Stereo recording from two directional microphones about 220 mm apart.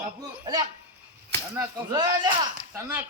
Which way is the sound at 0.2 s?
20° right (ahead or behind).